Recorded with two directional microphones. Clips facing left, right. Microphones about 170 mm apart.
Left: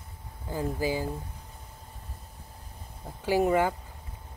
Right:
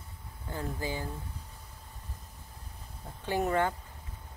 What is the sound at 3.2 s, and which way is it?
Speech, 10° left (ahead or behind).